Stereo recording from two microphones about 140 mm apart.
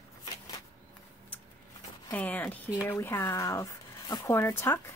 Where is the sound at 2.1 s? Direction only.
10° left (ahead or behind).